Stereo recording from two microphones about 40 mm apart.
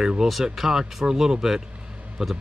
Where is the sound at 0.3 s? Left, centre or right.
Centre.